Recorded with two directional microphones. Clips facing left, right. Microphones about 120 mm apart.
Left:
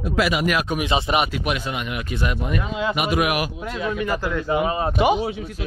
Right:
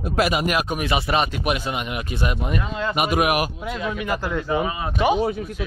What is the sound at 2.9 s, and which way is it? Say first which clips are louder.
Speech: right 3 dB; 45° right (ahead or behind).